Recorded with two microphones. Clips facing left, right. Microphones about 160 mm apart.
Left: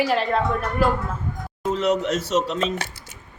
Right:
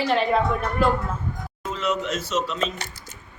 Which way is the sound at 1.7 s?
65° left (ahead or behind).